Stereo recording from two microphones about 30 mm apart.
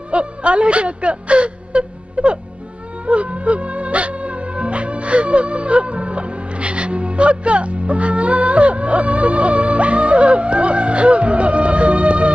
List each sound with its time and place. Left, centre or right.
0.1 s speech: right
3.1 s music: right